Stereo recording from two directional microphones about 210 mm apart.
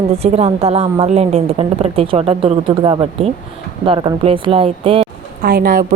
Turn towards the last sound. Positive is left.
turn(degrees=-45)  # may be behind; listen again after turning